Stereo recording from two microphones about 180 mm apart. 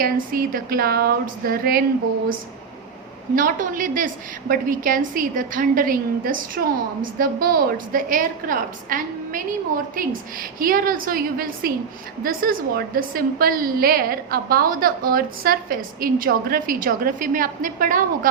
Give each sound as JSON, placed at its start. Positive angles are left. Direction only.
{"t": 0.0, "sound": "speech", "side_deg": -55}
{"t": 3.3, "sound": "a woman's voice", "side_deg": -50}